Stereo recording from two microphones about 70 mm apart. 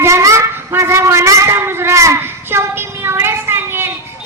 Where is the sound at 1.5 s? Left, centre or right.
Right.